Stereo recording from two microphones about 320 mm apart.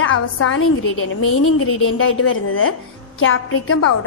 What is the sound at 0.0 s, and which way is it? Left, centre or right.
A woman's voice, left.